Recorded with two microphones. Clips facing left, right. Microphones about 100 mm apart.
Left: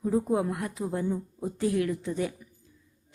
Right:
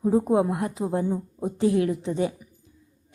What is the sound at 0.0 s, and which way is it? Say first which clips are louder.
A woman's voice: right 5 dB; 30° right (ahead or behind).